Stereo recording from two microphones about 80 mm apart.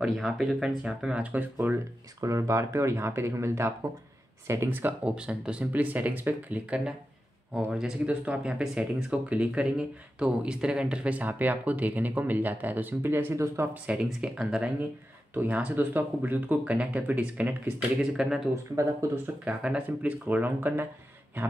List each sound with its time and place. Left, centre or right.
0.0 s speech: centre
2.2 s speech: right
4.6 s speech: right
5.1 s speech: centre; by 13.7 s right
13.8 s speech: centre
15.3 s speech: right
18.1 s speech: centre
18.5 s speech: right
19.4 s speech: centre